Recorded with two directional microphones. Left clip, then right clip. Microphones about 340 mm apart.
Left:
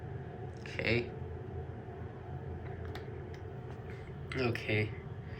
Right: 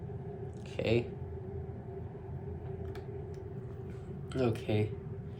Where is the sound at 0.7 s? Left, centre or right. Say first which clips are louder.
Right 1 dB; centre.